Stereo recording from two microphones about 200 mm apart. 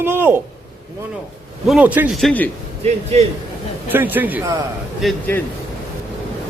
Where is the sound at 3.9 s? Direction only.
10° right (ahead or behind).